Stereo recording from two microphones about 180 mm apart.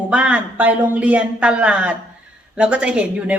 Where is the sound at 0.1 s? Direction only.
5° right (ahead or behind).